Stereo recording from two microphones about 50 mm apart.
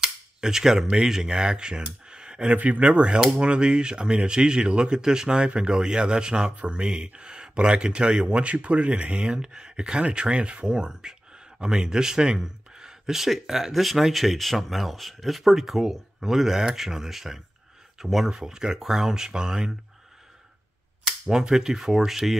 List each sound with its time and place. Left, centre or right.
0.0 s cutlery: centre
0.8 s speech: centre
2.0 s a sound: centre
2.5 s speech: right
21.3 s speech: centre